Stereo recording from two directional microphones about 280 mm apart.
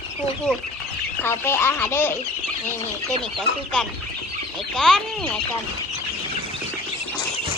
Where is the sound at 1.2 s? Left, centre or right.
Centre.